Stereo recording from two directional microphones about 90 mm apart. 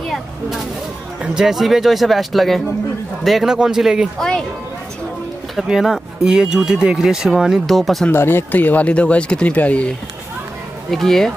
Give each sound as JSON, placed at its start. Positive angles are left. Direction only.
{"t": 0.1, "sound": "a sound", "side_deg": 0}
{"t": 1.2, "sound": "a man's voice", "side_deg": -5}
{"t": 4.2, "sound": "speech", "side_deg": 5}
{"t": 5.6, "sound": "speech", "side_deg": -5}
{"t": 8.1, "sound": "speech", "side_deg": 25}
{"t": 10.9, "sound": "speech", "side_deg": 5}